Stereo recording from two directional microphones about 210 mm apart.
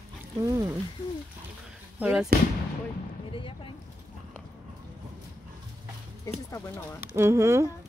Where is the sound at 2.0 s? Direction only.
5° right (ahead or behind).